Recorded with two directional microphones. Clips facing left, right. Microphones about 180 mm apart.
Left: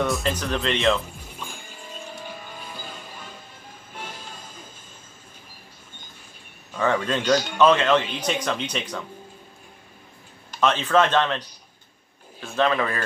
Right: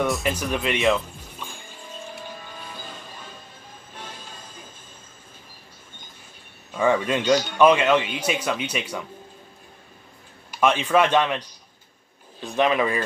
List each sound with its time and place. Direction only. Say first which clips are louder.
0.2 s speech: even; 10° right (ahead or behind)
6.8 s speech: right 2 dB; 10° right (ahead or behind)
10.5 s speech: right 1 dB; 10° right (ahead or behind)